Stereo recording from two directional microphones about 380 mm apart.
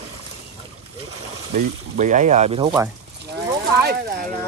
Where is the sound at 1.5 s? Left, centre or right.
Centre.